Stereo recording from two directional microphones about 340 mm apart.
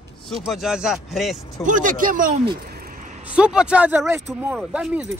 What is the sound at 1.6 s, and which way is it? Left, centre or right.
Speech, right.